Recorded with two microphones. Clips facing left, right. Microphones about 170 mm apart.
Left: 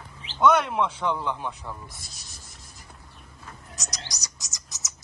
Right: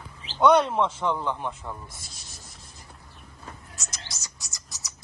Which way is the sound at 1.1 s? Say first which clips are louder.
Right 1 dB; 20° right (ahead or behind).